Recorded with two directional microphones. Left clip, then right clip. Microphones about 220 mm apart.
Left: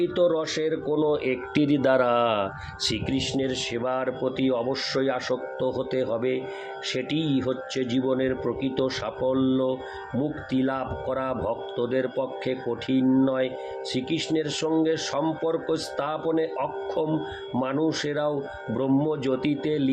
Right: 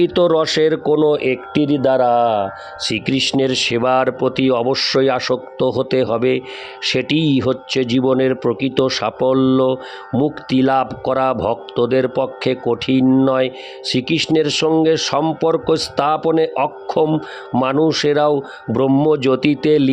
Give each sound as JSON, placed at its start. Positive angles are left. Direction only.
{"t": 0.0, "sound": "speech", "side_deg": -50}
{"t": 3.1, "sound": "speech", "side_deg": -50}